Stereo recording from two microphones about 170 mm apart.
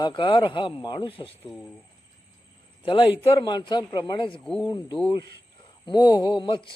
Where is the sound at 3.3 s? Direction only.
25° left (ahead or behind).